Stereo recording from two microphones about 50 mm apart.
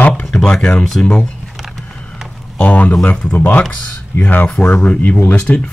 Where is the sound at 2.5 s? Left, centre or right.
Left.